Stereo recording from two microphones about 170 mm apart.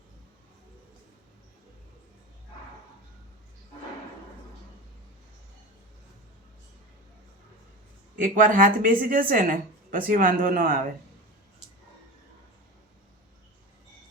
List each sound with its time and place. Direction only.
8.1 s a woman's voice: 55° right (ahead or behind)